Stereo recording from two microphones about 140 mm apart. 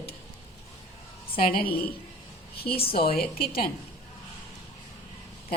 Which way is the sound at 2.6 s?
90° left.